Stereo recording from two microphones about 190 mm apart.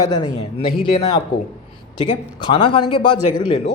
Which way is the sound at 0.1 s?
25° left (ahead or behind).